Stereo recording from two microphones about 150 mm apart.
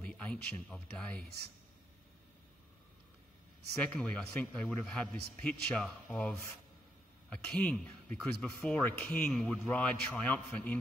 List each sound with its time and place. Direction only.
0.0 s speech: 5° left (ahead or behind)
3.8 s a man's voice: 5° left (ahead or behind)
7.4 s speech: 5° left (ahead or behind)